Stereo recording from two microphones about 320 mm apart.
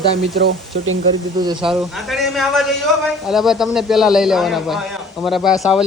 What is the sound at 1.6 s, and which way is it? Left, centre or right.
A man's voice, centre.